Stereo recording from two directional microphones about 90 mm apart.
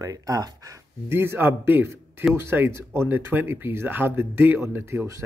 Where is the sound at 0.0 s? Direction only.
45° right (ahead or behind).